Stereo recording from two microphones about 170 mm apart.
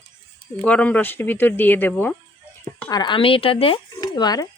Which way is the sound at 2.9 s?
25° left (ahead or behind).